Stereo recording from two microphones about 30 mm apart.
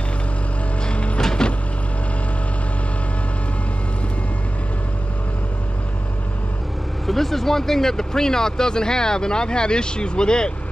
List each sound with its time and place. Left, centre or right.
0.8 s music: left
7.1 s speech: centre; by 10.5 s left